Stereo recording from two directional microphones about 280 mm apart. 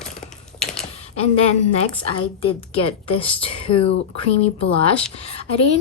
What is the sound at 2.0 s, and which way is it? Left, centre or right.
A woman's voice, centre.